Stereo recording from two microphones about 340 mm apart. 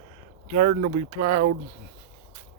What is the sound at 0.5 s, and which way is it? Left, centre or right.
Speech, right.